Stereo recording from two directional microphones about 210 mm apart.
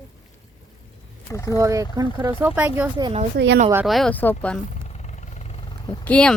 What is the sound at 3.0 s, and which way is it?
Speech, 25° right (ahead or behind).